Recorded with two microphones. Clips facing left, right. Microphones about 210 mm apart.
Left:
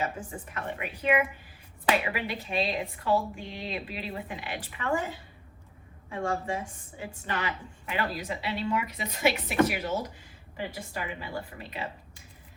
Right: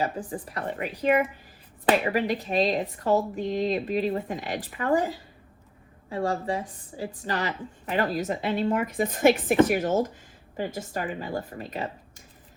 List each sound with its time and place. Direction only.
0.0 s a woman's voice: 35° right (ahead or behind)